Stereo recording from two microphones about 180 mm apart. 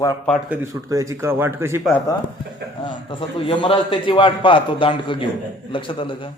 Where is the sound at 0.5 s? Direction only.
15° right (ahead or behind).